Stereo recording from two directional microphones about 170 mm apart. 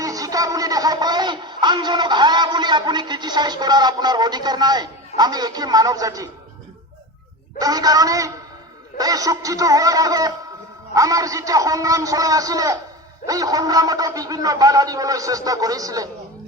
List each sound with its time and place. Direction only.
0.0 s speech: 20° right (ahead or behind)
7.6 s a man's voice: 20° right (ahead or behind)